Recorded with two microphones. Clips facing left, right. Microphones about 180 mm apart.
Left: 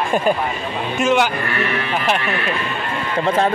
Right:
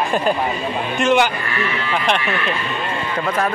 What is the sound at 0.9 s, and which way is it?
Speech, 5° left (ahead or behind).